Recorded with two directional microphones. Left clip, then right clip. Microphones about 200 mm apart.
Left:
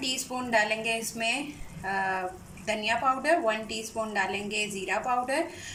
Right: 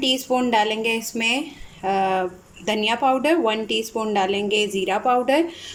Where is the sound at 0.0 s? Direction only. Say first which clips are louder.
Right 11 dB; 40° right (ahead or behind).